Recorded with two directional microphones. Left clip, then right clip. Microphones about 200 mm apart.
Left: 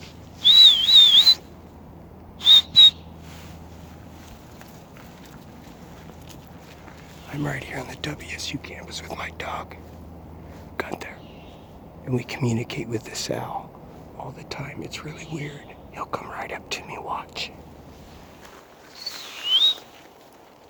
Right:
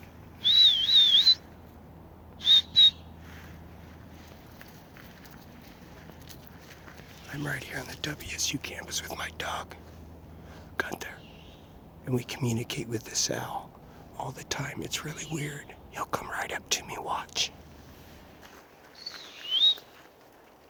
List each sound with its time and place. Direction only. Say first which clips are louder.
0.4 s whistling: left 8 dB; 40° left (ahead or behind)
2.4 s whistle: left 7 dB; 40° left (ahead or behind)
7.3 s speech: left 5 dB; 10° left (ahead or behind)
10.8 s whispering: left 2 dB; centre (ahead or behind)
12.0 s speech: left 5 dB; centre (ahead or behind)
14.2 s speech: even; 15° right (ahead or behind)
18.9 s a sound: left 8 dB; 40° left (ahead or behind)